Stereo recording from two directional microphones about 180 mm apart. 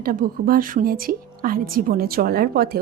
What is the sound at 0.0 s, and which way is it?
A woman's voice, 50° right (ahead or behind).